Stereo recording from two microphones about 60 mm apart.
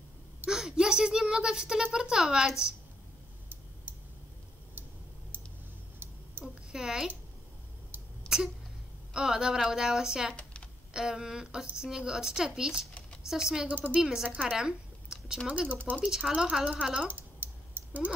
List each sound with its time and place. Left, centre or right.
0.5 s speech: centre
6.4 s a sound: centre
8.3 s a sound: left
9.1 s speech: centre
13.7 s speech: right
14.0 s speech: centre
14.3 s speech: right
15.4 s speech: right
17.0 s typing: right